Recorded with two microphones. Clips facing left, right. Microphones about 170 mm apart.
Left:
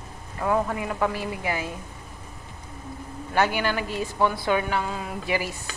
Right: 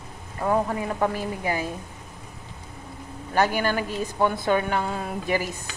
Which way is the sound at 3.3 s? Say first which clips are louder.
Right 1 dB; 40° right (ahead or behind).